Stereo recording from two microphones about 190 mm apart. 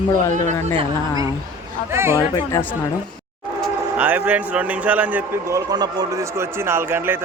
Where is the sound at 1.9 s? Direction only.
15° right (ahead or behind).